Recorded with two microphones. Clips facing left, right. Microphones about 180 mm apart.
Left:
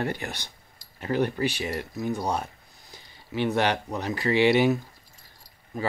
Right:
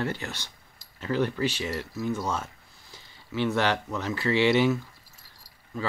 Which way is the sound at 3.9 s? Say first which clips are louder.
Left 1 dB; 15° left (ahead or behind).